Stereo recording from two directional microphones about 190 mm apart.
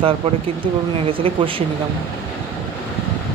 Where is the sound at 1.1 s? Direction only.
30° right (ahead or behind).